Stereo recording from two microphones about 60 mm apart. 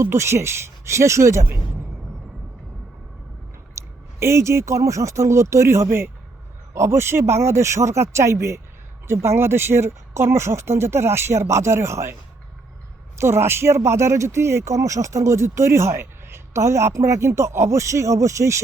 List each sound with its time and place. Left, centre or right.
0.0 s speech: right
3.8 s speech: right
5.6 s speech: right
13.1 s speech: right